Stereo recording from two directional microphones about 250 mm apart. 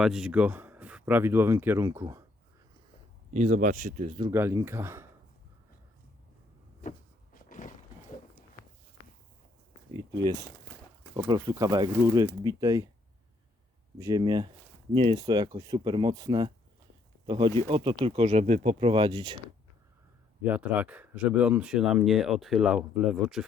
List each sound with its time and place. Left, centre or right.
0.0 s speech: centre
3.3 s speech: right
4.2 s speech: centre
7.3 s a sound: left
10.2 s speech: centre
14.0 s speech: centre
20.4 s speech: centre